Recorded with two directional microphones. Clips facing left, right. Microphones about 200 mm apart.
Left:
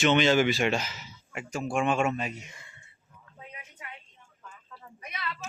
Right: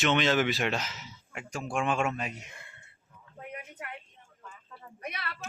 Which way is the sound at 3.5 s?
60° right (ahead or behind).